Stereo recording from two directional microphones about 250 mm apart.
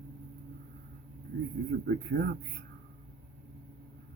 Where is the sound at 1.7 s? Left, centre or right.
Right.